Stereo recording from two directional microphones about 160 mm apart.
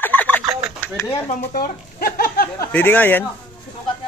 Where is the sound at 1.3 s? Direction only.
60° left (ahead or behind).